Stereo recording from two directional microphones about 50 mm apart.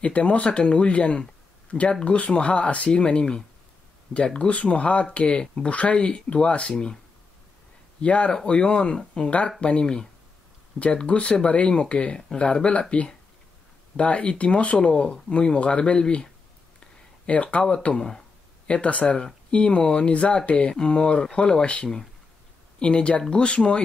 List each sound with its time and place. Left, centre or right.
0.0 s speech: left
8.0 s speech: left
13.9 s speech: left
17.3 s speech: left